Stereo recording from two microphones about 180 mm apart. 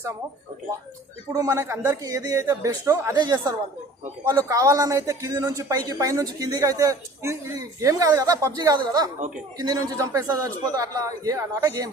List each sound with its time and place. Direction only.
1.3 s a man's voice: 20° right (ahead or behind)